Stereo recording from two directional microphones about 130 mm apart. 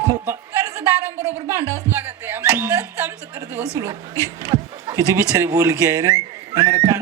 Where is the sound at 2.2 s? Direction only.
15° right (ahead or behind).